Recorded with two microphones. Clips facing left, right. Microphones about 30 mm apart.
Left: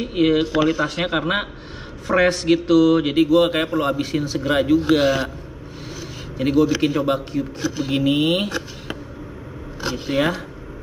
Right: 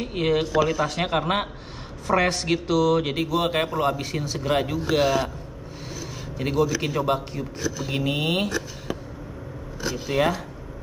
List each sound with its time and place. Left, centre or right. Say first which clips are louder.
0.0 s a man's voice: left 5 dB; centre
4.7 s a man's voice: left 5 dB; centre
6.3 s a man's voice: left 6 dB; centre
7.6 s a man's voice: left 4 dB; left
7.9 s a man's voice: left 7 dB; centre
8.5 s speech: left 1 dB; left
10.1 s a man's voice: left 2 dB; centre